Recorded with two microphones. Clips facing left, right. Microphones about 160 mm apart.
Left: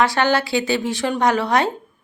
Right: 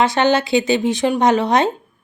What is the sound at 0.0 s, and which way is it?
Speech, 20° right (ahead or behind).